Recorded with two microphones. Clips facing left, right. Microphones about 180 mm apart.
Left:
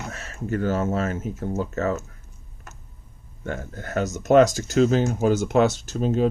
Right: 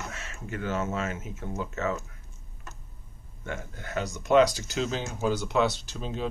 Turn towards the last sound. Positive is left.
turn(degrees=50)  # may be behind; listen again after turning